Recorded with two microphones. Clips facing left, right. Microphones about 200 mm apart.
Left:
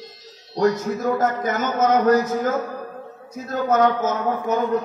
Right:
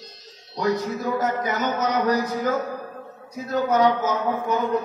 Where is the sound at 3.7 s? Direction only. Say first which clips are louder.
Left 2 dB; 45° left (ahead or behind).